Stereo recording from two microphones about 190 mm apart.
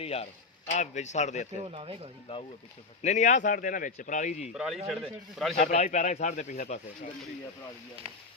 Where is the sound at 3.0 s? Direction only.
40° left (ahead or behind).